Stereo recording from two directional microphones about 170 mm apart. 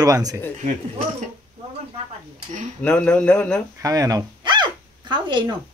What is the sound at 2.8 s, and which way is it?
Speech, 5° left (ahead or behind).